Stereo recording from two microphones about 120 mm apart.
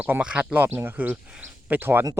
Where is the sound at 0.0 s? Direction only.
10° right (ahead or behind).